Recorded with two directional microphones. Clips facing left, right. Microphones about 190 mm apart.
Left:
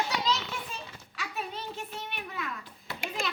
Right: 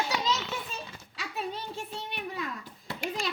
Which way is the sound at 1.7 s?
30° right (ahead or behind).